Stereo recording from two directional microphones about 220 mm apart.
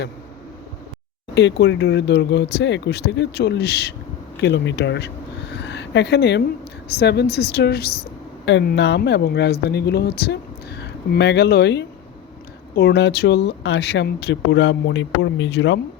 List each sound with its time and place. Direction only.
1.4 s speech: 50° left (ahead or behind)
4.4 s a sound: 50° left (ahead or behind)
6.9 s speech: 50° left (ahead or behind)